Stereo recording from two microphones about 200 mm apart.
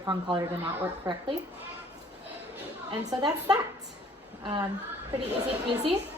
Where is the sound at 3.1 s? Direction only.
20° right (ahead or behind).